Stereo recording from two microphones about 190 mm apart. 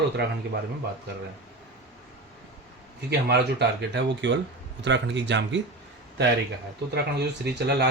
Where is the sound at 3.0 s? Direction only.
60° right (ahead or behind).